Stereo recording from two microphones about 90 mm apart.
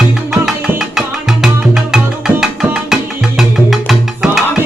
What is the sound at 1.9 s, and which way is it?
Music, 5° right (ahead or behind).